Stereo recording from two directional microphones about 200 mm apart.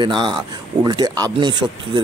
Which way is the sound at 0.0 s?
25° right (ahead or behind).